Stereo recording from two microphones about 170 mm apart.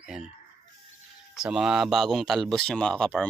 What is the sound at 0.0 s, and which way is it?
Chicken, 5° right (ahead or behind).